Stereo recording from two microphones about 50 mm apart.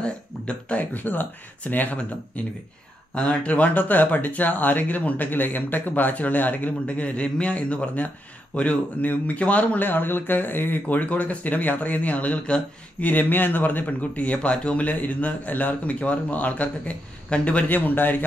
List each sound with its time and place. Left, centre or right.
0.0 s speech: left
0.9 s speech: left
3.2 s speech: left
9.0 s speech: left